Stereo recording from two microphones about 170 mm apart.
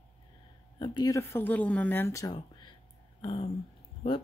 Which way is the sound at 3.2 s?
30° left (ahead or behind).